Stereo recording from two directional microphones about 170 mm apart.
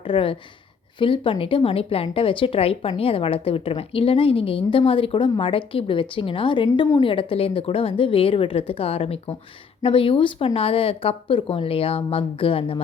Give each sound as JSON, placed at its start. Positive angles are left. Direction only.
{"t": 0.0, "sound": "speech", "side_deg": 30}